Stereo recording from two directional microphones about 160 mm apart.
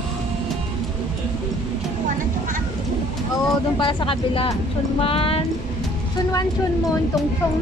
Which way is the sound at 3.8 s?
30° left (ahead or behind).